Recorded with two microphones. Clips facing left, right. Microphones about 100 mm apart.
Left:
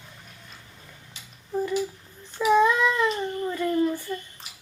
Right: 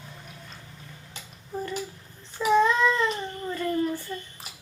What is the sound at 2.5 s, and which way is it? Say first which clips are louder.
Child singing: left 1 dB; 10° left (ahead or behind).